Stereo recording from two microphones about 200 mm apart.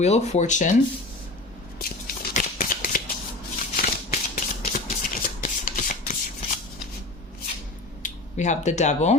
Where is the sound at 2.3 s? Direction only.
40° left (ahead or behind).